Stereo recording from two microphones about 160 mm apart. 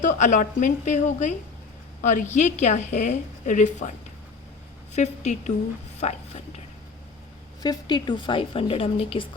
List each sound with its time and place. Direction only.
0.0 s a woman's voice: 50° left (ahead or behind)
4.9 s a woman's voice: 45° left (ahead or behind)
7.6 s a woman's voice: 25° left (ahead or behind)